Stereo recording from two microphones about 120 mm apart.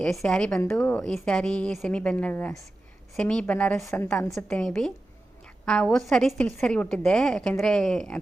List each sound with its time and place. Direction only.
0.0 s a woman's voice: 5° left (ahead or behind)
3.8 s a woman's voice: 25° left (ahead or behind)
4.4 s a woman's voice: 5° left (ahead or behind)